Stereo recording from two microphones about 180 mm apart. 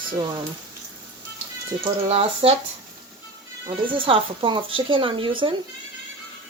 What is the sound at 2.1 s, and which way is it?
Speech, 30° right (ahead or behind).